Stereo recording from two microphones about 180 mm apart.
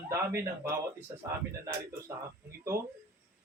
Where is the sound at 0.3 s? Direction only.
15° right (ahead or behind).